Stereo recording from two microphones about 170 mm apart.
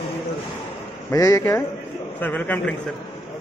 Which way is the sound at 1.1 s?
20° left (ahead or behind).